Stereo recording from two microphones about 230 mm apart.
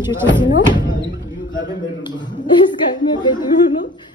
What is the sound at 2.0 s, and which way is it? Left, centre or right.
A woman's voice, centre.